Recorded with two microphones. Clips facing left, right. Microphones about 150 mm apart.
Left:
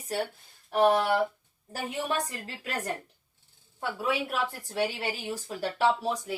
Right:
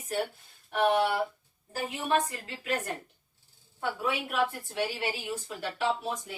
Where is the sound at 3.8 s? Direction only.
40° left (ahead or behind).